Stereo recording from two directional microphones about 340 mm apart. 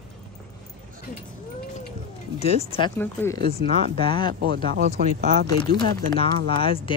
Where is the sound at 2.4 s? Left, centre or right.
Centre.